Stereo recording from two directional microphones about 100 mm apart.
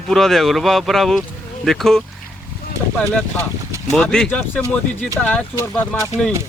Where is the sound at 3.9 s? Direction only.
5° left (ahead or behind).